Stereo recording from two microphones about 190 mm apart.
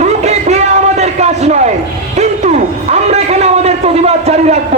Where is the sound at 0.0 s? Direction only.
35° right (ahead or behind).